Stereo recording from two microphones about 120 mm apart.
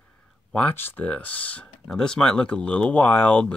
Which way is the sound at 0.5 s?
15° left (ahead or behind).